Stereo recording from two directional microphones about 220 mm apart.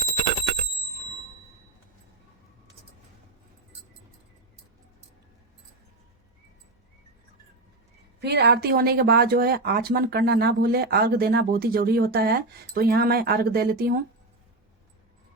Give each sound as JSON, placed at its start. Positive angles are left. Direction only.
{"t": 8.2, "sound": "speech", "side_deg": -50}